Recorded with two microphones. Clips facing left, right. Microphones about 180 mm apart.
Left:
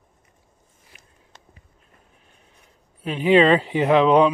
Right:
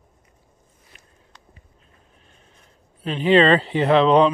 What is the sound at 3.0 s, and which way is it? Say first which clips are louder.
Speech: even; 10° left (ahead or behind).